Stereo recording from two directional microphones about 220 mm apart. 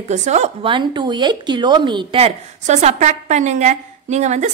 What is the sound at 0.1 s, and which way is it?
A woman's voice, 30° right (ahead or behind).